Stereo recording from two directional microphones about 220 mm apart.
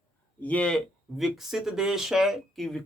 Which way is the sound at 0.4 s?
5° left (ahead or behind).